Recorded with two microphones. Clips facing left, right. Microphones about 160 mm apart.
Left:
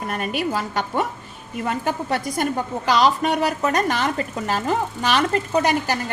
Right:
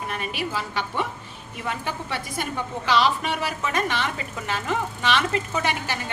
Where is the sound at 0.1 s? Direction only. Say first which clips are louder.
Left 7 dB; 45° left (ahead or behind).